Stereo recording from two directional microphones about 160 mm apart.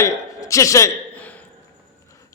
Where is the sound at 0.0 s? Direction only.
20° left (ahead or behind).